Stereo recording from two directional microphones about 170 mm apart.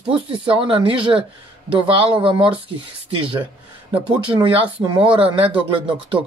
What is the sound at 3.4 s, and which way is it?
Speech, 10° right (ahead or behind).